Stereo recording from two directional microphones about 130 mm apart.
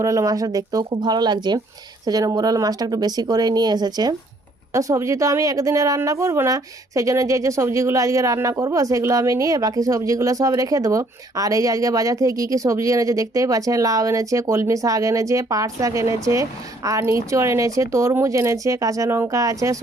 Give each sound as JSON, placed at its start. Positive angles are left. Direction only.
{"t": 0.0, "sound": "a woman's voice", "side_deg": -25}